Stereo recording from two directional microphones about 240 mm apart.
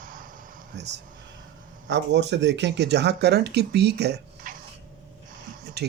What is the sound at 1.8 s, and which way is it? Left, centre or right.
Speech, right.